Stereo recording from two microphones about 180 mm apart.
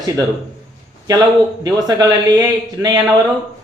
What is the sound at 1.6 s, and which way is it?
Speech, 20° right (ahead or behind).